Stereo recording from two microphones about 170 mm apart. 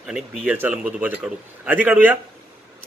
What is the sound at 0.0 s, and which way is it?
A man's voice, centre (ahead or behind).